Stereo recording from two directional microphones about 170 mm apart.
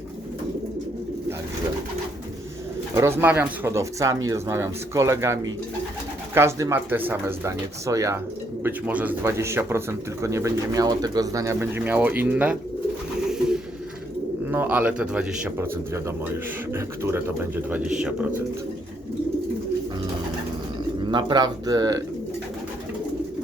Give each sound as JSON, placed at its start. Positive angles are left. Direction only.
{"t": 2.9, "sound": "speech", "side_deg": -15}
{"t": 14.5, "sound": "speech", "side_deg": -10}
{"t": 21.1, "sound": "speech", "side_deg": -25}